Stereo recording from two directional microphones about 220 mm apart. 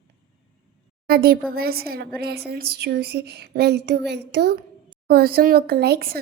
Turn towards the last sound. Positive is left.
turn(degrees=-45)  # may be behind; listen again after turning